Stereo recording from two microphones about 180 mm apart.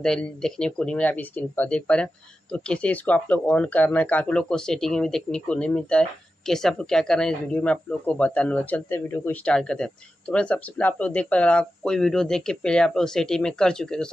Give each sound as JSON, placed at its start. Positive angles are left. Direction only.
{"t": 0.0, "sound": "speech", "side_deg": 5}